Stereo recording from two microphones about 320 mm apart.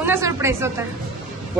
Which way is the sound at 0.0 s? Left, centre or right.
Centre.